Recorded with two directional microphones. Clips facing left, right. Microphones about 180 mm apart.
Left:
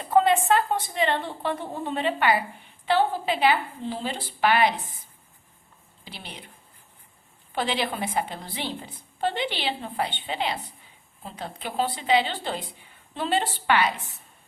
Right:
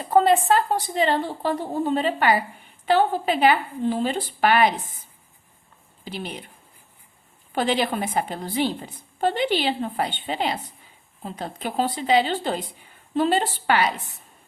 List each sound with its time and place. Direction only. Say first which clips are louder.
0.1 s a woman's voice: right 2 dB; 35° right (ahead or behind)
7.5 s a woman's voice: right 5 dB; 45° right (ahead or behind)